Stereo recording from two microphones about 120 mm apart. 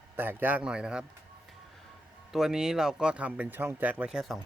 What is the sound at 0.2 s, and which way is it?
Speech, 15° right (ahead or behind).